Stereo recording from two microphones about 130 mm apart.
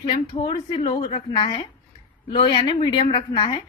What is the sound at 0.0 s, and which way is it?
A woman's voice, 35° left (ahead or behind).